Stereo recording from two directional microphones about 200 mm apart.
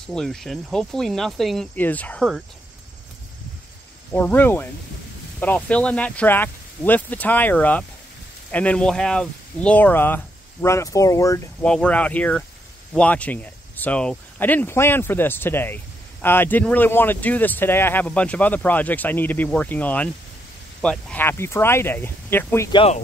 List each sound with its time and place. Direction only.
0.0 s speech: centre (ahead or behind)
4.1 s speech: 10° left (ahead or behind)
11.6 s speech: 5° left (ahead or behind)
22.7 s speech: 25° left (ahead or behind)